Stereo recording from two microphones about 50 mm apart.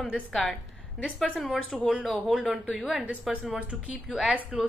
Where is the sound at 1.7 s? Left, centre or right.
Centre.